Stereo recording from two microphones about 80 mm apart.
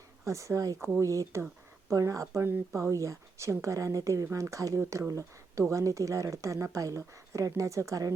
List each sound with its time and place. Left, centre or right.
0.3 s speech: right